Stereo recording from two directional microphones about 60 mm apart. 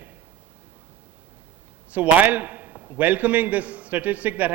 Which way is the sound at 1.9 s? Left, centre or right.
Right.